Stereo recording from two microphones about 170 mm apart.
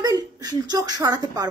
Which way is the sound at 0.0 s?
20° right (ahead or behind).